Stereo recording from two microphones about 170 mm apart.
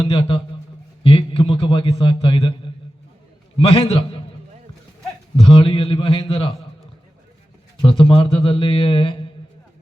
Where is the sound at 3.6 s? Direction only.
35° left (ahead or behind).